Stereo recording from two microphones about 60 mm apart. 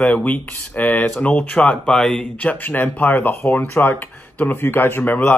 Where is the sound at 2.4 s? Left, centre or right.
Left.